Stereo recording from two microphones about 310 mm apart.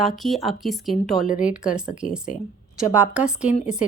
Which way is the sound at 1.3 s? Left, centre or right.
Left.